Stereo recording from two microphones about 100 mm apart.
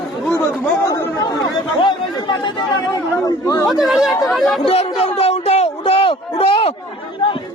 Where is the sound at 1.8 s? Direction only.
50° left (ahead or behind).